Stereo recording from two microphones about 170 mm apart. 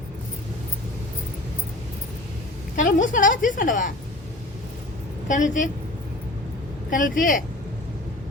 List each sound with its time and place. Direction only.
2.7 s a woman's voice: 50° left (ahead or behind)
5.3 s a woman's voice: 50° left (ahead or behind)
6.9 s a woman's voice: 50° left (ahead or behind)